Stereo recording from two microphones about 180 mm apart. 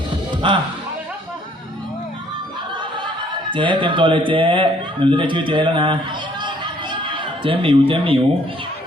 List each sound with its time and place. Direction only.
0.4 s speech: 25° right (ahead or behind)
3.5 s speech: 25° right (ahead or behind)